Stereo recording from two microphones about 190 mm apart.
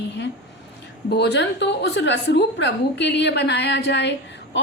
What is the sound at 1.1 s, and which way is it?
A woman's voice, 60° left (ahead or behind).